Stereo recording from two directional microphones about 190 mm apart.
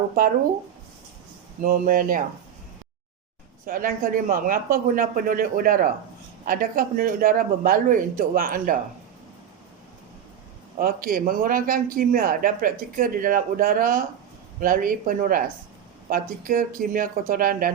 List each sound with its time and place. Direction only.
1.6 s a man's voice: 45° right (ahead or behind)
3.7 s a man's voice: 50° right (ahead or behind)
10.8 s a man's voice: 50° right (ahead or behind)